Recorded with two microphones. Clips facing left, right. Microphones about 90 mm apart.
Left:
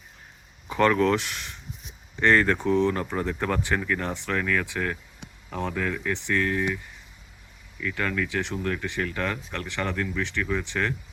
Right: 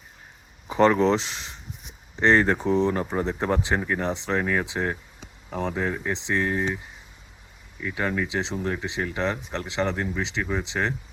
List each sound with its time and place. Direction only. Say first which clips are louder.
0.7 s speech: right 2 dB; 25° right (ahead or behind)